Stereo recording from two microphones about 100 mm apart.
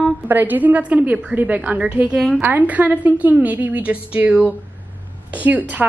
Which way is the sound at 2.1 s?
5° left (ahead or behind).